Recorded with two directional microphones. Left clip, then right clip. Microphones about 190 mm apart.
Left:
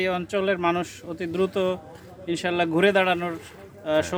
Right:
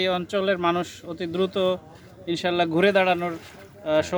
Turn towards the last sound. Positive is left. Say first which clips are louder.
# right 1 dB
turn(degrees=-15)  # may be behind; listen again after turning